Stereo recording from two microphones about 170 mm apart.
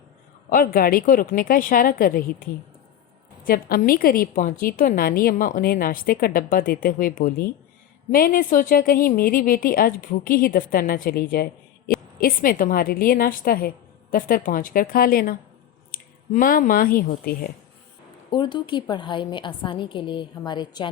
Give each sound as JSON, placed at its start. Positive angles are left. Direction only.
{"t": 0.5, "sound": "a woman's voice", "side_deg": 55}
{"t": 11.9, "sound": "a sound", "side_deg": 60}
{"t": 12.2, "sound": "a woman's voice", "side_deg": 55}
{"t": 18.3, "sound": "a woman's voice", "side_deg": 25}